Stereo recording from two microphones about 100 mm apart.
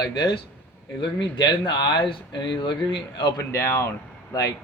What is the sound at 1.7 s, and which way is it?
Speech, 45° left (ahead or behind).